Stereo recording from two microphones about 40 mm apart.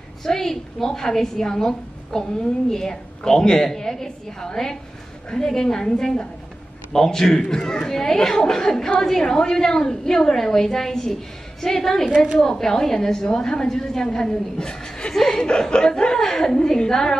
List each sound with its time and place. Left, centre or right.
0.2 s a woman's voice: centre